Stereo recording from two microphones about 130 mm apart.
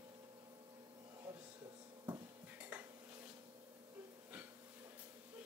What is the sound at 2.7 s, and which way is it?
Dishes, 10° right (ahead or behind).